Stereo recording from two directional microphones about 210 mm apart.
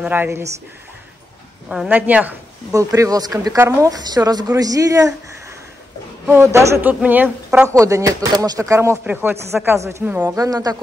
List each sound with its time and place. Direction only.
0.0 s a woman's voice: 10° right (ahead or behind)
1.7 s a woman's voice: 5° right (ahead or behind)
6.2 s a woman's voice: 10° right (ahead or behind)